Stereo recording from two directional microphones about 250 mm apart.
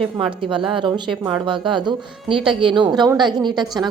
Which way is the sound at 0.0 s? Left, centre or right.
Centre.